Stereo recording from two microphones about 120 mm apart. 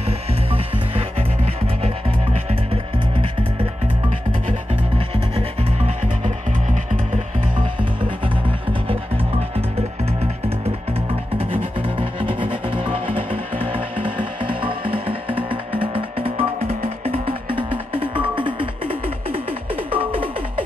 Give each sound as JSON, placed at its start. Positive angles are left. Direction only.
{"t": 0.0, "sound": "music", "side_deg": -55}
{"t": 4.9, "sound": "music", "side_deg": -55}
{"t": 8.8, "sound": "music", "side_deg": -55}